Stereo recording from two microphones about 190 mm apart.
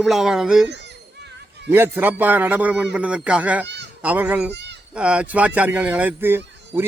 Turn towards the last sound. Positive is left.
turn(degrees=-10)  # may be behind; listen again after turning